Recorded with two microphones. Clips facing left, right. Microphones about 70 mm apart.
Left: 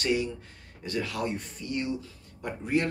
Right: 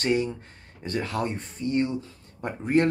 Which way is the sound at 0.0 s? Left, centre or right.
Right.